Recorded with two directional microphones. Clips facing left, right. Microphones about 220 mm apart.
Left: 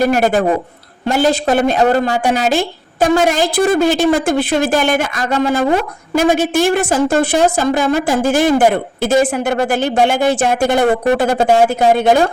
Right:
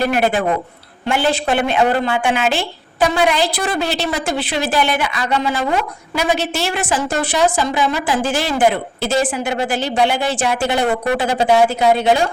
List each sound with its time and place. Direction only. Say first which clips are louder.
0.0 s a woman's voice: left 4 dB; 40° left (ahead or behind)